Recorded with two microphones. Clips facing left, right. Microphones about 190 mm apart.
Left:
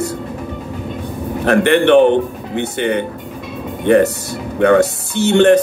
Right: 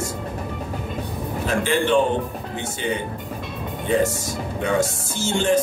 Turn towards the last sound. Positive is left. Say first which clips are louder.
# left 10 dB
turn(degrees=65)  # may be behind; listen again after turning